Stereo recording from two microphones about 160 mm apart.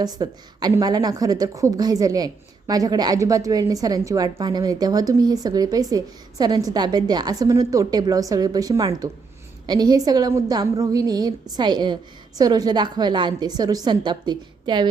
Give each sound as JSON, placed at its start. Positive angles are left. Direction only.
{"t": 0.0, "sound": "a woman's voice", "side_deg": -25}